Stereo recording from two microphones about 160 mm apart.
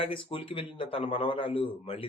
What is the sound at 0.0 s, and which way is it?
A man's voice, 35° left (ahead or behind).